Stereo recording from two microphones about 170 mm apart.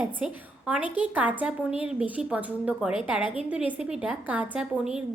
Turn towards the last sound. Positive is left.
turn(degrees=-5)  # may be behind; listen again after turning